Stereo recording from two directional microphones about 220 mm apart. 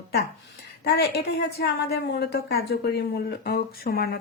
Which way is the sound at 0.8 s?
50° left (ahead or behind).